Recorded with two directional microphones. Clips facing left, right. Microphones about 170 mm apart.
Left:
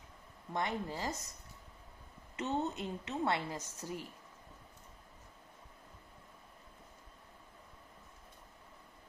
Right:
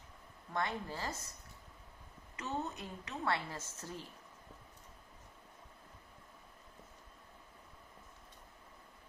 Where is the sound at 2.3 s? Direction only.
25° left (ahead or behind).